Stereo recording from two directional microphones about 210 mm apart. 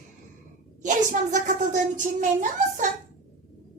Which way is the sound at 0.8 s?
35° right (ahead or behind).